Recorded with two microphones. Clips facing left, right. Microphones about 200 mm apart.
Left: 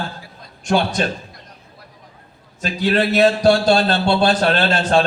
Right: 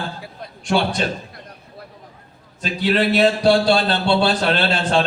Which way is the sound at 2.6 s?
45° left (ahead or behind).